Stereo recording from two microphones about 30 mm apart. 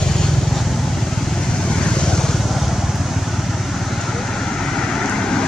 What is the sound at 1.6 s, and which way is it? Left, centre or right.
Vehicle, left.